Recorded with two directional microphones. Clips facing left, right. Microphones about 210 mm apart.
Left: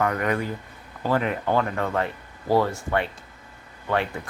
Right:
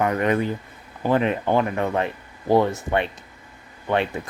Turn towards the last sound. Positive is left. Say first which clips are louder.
# right 3 dB
turn(degrees=-20)  # may be behind; listen again after turning